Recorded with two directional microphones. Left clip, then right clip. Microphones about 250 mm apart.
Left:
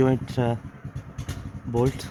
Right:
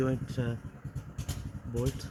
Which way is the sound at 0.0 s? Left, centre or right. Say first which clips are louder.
Left 10 dB; left.